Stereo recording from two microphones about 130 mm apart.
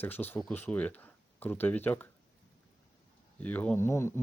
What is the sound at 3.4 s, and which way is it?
Speech, 10° left (ahead or behind).